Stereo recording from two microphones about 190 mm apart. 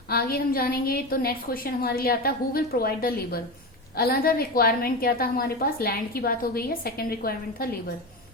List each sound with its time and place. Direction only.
0.1 s a woman's voice: 50° left (ahead or behind)